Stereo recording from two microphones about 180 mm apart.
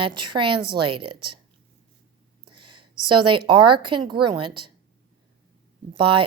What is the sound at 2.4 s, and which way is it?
Speech, 30° right (ahead or behind).